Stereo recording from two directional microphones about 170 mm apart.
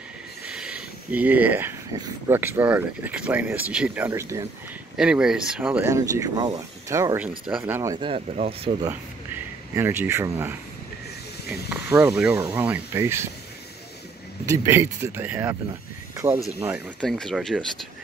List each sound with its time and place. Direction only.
0.5 s a sound: 5° right (ahead or behind)
2.0 s speech: 15° right (ahead or behind)
4.9 s speech: 5° right (ahead or behind)
8.1 s speech: 35° right (ahead or behind)
8.8 s speech: 15° right (ahead or behind)
14.4 s speech: 15° right (ahead or behind)
17.0 s speech: centre (ahead or behind)